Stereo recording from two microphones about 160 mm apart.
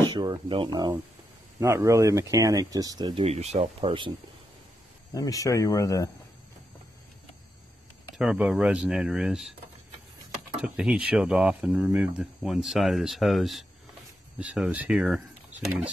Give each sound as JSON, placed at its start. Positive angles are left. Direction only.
{"t": 0.1, "sound": "speech", "side_deg": -25}
{"t": 3.3, "sound": "speech", "side_deg": -45}
{"t": 5.1, "sound": "speech", "side_deg": 20}
{"t": 8.2, "sound": "speech", "side_deg": -5}
{"t": 10.6, "sound": "speech", "side_deg": -5}